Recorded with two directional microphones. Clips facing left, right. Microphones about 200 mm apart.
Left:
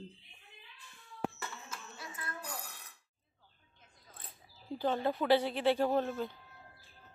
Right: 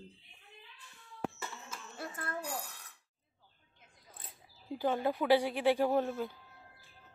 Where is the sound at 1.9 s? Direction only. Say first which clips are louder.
Right 7 dB; 55° right (ahead or behind).